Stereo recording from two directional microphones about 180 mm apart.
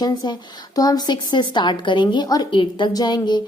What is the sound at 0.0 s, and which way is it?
A woman's voice, 25° left (ahead or behind).